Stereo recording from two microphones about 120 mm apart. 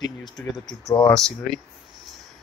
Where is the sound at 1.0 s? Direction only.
5° left (ahead or behind).